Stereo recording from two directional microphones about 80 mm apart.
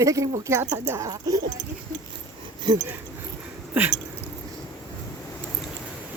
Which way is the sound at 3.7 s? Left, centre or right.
Right.